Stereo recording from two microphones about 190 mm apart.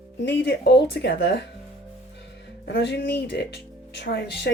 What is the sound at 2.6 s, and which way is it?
A woman's voice, 65° left (ahead or behind).